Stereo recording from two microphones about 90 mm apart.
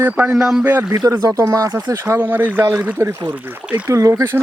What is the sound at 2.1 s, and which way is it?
Speech, 20° right (ahead or behind).